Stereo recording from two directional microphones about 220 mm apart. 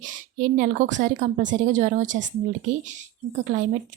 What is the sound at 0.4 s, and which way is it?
A woman's voice, 35° right (ahead or behind).